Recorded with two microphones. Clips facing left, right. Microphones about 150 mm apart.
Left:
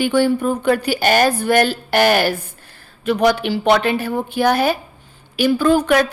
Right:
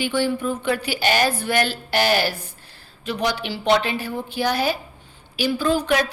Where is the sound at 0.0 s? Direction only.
50° left (ahead or behind).